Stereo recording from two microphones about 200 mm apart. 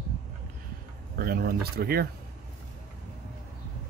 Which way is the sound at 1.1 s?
50° right (ahead or behind).